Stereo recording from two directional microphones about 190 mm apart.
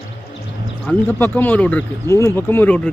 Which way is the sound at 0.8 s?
10° left (ahead or behind).